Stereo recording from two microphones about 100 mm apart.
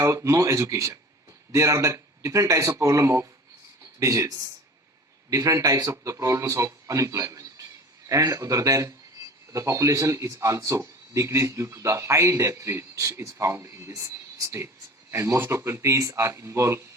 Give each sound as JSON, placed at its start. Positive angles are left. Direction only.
{"t": 0.0, "sound": "speech", "side_deg": -30}